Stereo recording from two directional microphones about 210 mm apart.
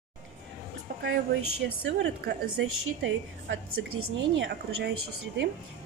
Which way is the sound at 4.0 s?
65° right (ahead or behind).